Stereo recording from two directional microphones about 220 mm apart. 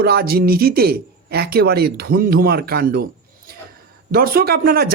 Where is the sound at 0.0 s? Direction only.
45° right (ahead or behind).